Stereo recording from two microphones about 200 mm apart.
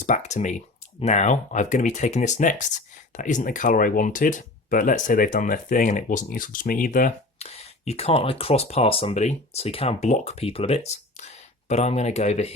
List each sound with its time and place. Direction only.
0.0 s speech: 35° left (ahead or behind)